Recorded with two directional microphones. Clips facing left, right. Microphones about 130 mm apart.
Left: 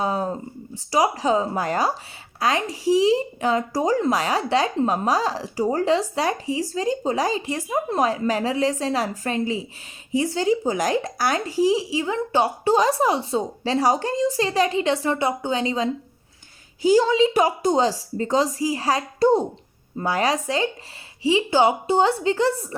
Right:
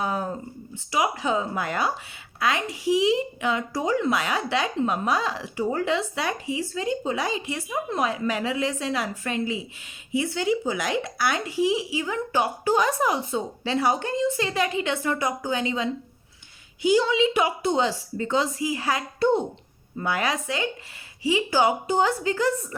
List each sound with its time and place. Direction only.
0.0 s a woman's voice: 30° left (ahead or behind)